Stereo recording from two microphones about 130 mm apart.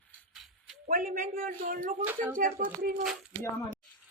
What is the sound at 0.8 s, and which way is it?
A man's voice, 90° right.